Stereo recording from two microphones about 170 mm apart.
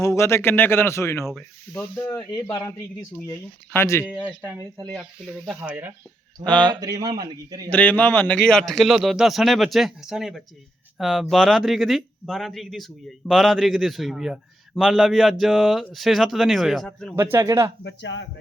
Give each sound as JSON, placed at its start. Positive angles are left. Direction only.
{"t": 0.0, "sound": "speech", "side_deg": 15}
{"t": 2.3, "sound": "speech", "side_deg": 20}
{"t": 4.0, "sound": "speech", "side_deg": -5}
{"t": 6.4, "sound": "speech", "side_deg": 5}
{"t": 6.7, "sound": "speech", "side_deg": -20}
{"t": 7.7, "sound": "a man's voice", "side_deg": 10}
{"t": 17.2, "sound": "speech", "side_deg": -15}
{"t": 17.8, "sound": "speech", "side_deg": 90}